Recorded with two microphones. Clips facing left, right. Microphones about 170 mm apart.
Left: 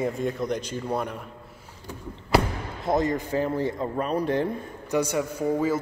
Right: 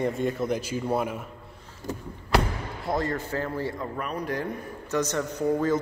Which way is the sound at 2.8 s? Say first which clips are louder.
Left 4 dB; 20° left (ahead or behind).